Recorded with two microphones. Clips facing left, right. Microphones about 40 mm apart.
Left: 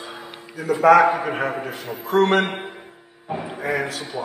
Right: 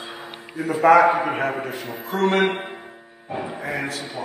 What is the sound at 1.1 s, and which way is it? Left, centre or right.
Speech, centre.